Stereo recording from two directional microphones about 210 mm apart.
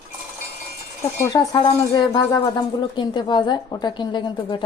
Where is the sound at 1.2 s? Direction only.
20° left (ahead or behind).